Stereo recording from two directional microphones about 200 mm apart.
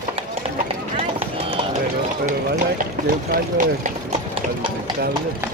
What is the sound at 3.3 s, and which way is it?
Speech, 45° right (ahead or behind).